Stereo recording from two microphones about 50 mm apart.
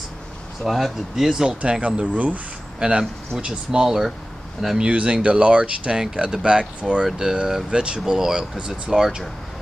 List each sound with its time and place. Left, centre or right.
0.7 s speech: centre
1.6 s speech: right
3.0 s speech: centre
4.8 s speech: right